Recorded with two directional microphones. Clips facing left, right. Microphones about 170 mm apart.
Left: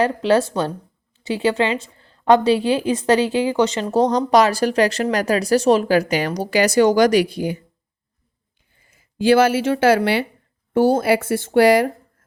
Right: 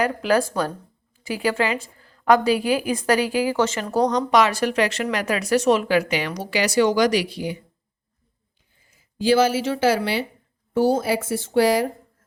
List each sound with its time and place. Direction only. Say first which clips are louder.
0.0 s a woman's voice: left 3 dB; 25° left (ahead or behind); by 7.6 s 50° left (ahead or behind)
8.7 s speech: left 4 dB; 60° left (ahead or behind)